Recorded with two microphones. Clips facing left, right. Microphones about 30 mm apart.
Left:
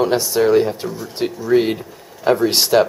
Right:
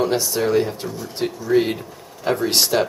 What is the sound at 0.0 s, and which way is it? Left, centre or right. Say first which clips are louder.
Speech: left 4 dB; centre.